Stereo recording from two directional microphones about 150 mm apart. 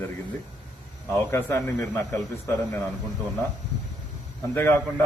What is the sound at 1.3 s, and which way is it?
A man's voice, 15° left (ahead or behind).